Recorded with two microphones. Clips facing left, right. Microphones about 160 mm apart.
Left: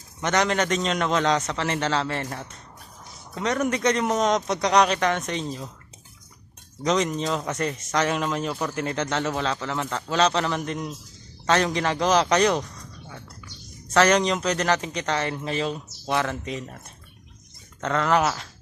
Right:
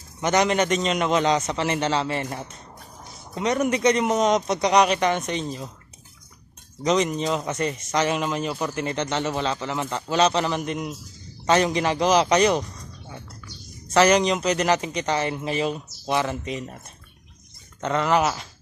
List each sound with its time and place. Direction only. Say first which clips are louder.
0.2 s a man's voice: right 2 dB; 5° right (ahead or behind)
6.8 s a man's voice: right 2 dB; centre (ahead or behind)
13.9 s a man's voice: right 2 dB; 5° right (ahead or behind)